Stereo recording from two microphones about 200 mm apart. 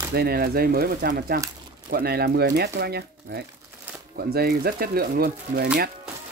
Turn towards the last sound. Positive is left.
turn(degrees=-50)  # may be behind; listen again after turning